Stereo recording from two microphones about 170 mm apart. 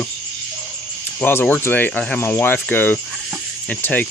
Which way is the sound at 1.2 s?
10° left (ahead or behind).